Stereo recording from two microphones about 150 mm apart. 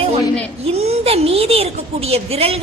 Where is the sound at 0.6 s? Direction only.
40° right (ahead or behind).